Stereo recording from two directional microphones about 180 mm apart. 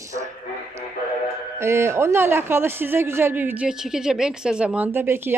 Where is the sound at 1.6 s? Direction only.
15° right (ahead or behind).